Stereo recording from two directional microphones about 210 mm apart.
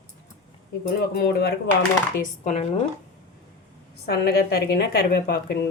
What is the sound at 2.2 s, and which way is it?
Speech, 35° left (ahead or behind).